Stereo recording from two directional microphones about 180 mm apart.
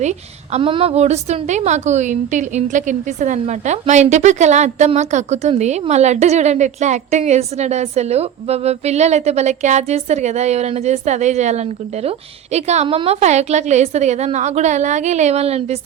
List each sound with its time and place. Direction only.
0.0 s a woman's voice: 40° right (ahead or behind)